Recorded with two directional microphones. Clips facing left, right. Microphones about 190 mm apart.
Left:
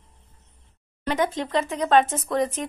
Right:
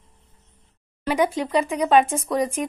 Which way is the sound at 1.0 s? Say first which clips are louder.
Right 3 dB; 10° right (ahead or behind).